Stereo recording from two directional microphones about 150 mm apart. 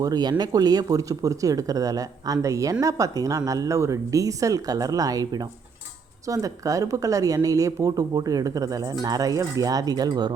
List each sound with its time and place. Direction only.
0.0 s speech: 25° right (ahead or behind)